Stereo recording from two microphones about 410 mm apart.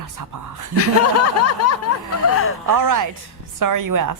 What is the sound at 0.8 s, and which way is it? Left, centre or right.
A woman's voice, left.